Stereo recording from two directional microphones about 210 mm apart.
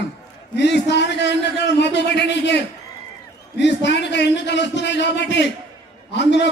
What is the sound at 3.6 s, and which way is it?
A man's voice, 55° left (ahead or behind).